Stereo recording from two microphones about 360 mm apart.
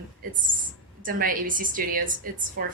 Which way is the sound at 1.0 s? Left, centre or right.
Right.